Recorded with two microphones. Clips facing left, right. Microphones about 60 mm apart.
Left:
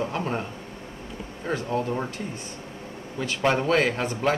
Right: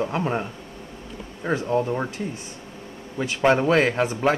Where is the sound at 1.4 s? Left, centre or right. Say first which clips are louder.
Right 4 dB; centre.